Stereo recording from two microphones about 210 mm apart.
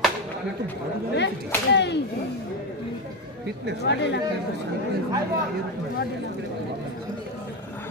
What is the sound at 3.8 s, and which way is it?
Whip, 55° left (ahead or behind).